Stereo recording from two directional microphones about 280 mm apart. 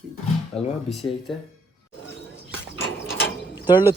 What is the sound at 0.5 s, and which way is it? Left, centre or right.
Speech, centre.